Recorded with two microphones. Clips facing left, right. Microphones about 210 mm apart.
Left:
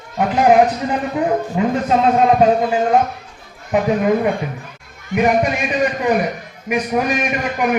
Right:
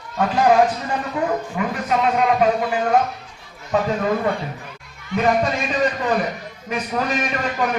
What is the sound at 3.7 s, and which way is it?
A man's voice, 15° left (ahead or behind).